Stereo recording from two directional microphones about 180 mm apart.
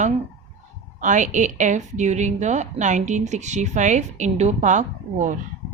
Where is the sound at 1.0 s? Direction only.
45° right (ahead or behind).